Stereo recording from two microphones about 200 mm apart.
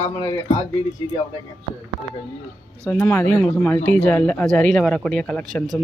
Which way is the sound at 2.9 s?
10° left (ahead or behind).